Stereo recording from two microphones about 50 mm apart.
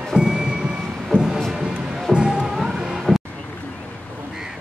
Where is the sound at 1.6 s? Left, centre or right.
Centre.